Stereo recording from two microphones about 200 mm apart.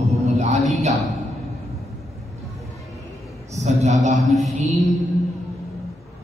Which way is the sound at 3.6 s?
35° right (ahead or behind).